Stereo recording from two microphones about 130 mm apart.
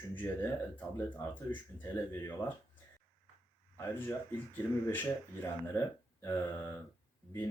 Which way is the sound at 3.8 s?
15° left (ahead or behind).